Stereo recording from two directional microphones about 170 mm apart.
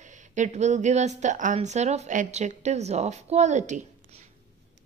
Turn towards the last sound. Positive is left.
turn(degrees=-45)  # may be behind; listen again after turning